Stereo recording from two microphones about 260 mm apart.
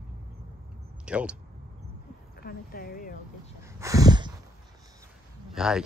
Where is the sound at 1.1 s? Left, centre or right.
Centre.